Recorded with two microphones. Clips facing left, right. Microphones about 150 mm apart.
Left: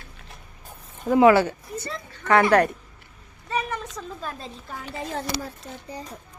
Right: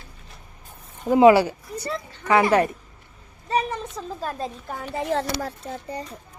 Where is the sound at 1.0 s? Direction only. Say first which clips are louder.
Right 2 dB; 20° right (ahead or behind).